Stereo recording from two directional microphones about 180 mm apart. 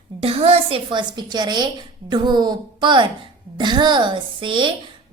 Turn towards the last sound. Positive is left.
turn(degrees=-25)  # may be behind; listen again after turning